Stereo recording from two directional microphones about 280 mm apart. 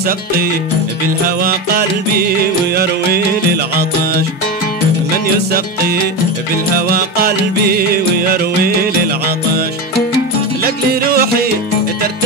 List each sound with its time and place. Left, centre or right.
1.4 s music: right
6.9 s music: right
10.6 s music: right